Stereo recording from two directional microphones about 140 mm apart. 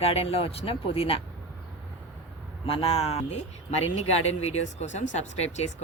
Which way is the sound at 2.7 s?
40° left (ahead or behind).